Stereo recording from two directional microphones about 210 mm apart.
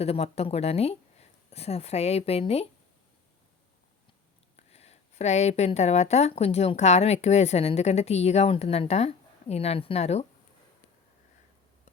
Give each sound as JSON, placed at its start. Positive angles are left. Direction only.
{"t": 0.0, "sound": "speech", "side_deg": 30}
{"t": 4.5, "sound": "speech", "side_deg": 30}